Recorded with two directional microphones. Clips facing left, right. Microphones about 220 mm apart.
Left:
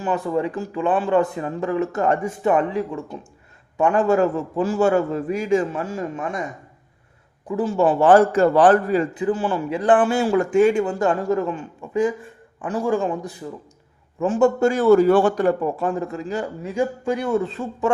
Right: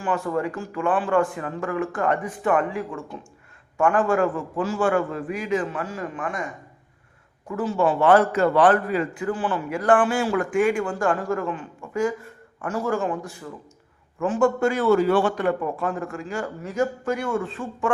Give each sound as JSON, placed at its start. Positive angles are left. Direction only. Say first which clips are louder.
{"t": 0.3, "sound": "a man's voice", "louder": "left 3 dB", "side_deg": 20}
{"t": 7.6, "sound": "a man's voice", "louder": "left 3 dB", "side_deg": 45}
{"t": 9.1, "sound": "a man's voice", "louder": "left 4 dB", "side_deg": 20}
{"t": 14.6, "sound": "a man's voice", "louder": "left 5 dB", "side_deg": 45}
{"t": 16.0, "sound": "a man's voice", "louder": "left 3 dB", "side_deg": 20}